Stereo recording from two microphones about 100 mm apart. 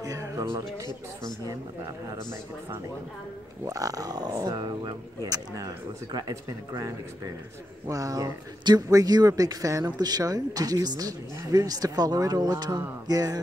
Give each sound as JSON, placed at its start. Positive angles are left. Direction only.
{"t": 0.0, "sound": "speech", "side_deg": -35}
{"t": 3.6, "sound": "speech", "side_deg": -35}
{"t": 7.9, "sound": "speech", "side_deg": -35}